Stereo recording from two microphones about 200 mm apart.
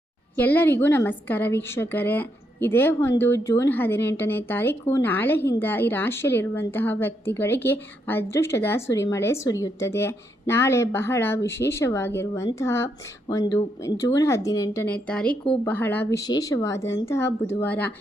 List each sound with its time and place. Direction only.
0.3 s speech: 10° left (ahead or behind)